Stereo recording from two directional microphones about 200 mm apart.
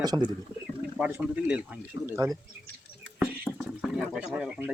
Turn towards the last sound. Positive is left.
turn(degrees=-5)  # may be behind; listen again after turning